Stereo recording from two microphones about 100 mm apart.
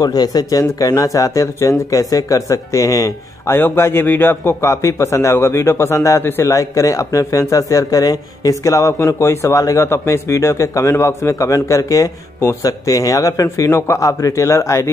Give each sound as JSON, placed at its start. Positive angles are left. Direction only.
{"t": 0.0, "sound": "speech", "side_deg": 40}
{"t": 3.5, "sound": "a man's voice", "side_deg": 20}